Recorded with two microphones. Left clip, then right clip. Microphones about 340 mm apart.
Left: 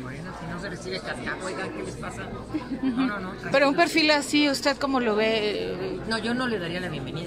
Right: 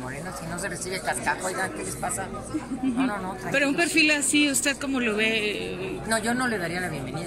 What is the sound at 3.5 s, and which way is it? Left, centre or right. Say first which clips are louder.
Speech: left 3 dB; centre.